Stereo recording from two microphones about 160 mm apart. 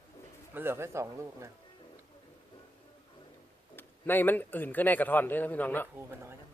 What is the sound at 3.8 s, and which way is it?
A man's voice, 10° left (ahead or behind).